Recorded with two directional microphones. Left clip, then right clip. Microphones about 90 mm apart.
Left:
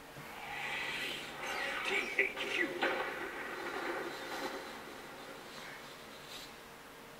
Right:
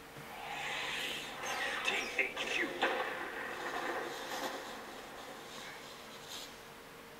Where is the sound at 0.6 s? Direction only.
30° right (ahead or behind).